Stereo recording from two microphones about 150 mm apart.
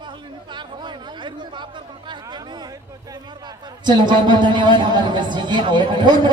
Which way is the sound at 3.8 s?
30° right (ahead or behind).